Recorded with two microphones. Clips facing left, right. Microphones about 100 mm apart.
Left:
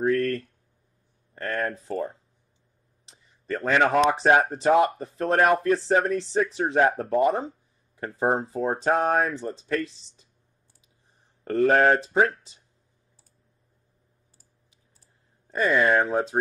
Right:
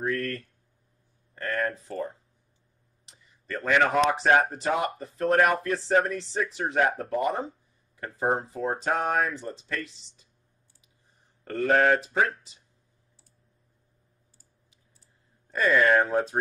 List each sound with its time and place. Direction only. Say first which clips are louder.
0.0 s speech: left 6 dB; 30° left (ahead or behind)
3.1 s a sound: left 5 dB; 30° left (ahead or behind)
4.4 s speech: left 6 dB; 30° left (ahead or behind)
11.4 s speech: left 3 dB; 35° left (ahead or behind)
15.5 s speech: even; 25° left (ahead or behind)
15.9 s speech: even; 5° left (ahead or behind)